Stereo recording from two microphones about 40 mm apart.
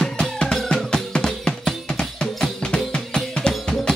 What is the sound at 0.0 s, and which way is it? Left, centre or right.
Music, centre.